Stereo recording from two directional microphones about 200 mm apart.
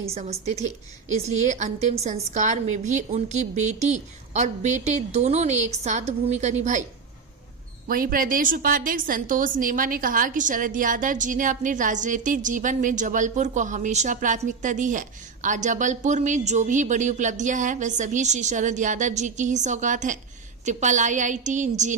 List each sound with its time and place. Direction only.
0.0 s a woman's voice: 30° right (ahead or behind)
7.9 s a woman's voice: 45° right (ahead or behind)